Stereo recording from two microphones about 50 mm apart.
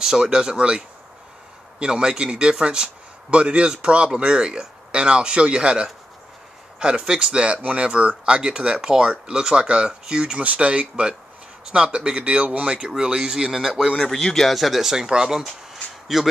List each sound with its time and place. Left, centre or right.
0.0 s speech: centre
10.4 s speech: right; by 13.8 s centre
13.9 s speech: centre
15.4 s a sound: centre